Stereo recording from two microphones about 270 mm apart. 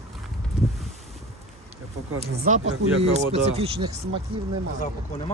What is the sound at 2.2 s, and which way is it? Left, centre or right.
Speech, right.